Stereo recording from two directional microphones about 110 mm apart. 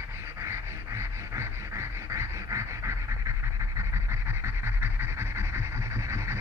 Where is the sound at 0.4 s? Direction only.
25° right (ahead or behind).